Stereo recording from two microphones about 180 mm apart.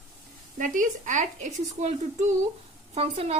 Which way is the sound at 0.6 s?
45° right (ahead or behind).